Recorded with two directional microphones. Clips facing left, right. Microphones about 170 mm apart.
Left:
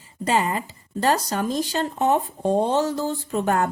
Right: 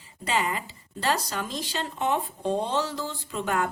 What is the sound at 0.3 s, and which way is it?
Speech, 45° left (ahead or behind).